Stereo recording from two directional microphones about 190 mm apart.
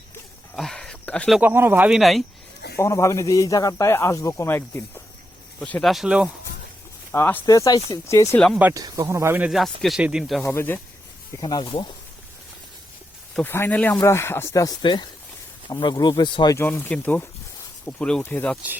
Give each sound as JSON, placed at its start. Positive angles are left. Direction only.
{"t": 0.5, "sound": "a sound", "side_deg": 5}
{"t": 1.4, "sound": "speech", "side_deg": -10}
{"t": 2.7, "sound": "speech", "side_deg": 15}
{"t": 7.1, "sound": "speech", "side_deg": 10}
{"t": 8.5, "sound": "speech", "side_deg": -10}
{"t": 9.5, "sound": "speech", "side_deg": 0}
{"t": 10.4, "sound": "speech", "side_deg": 15}
{"t": 13.3, "sound": "speech", "side_deg": 10}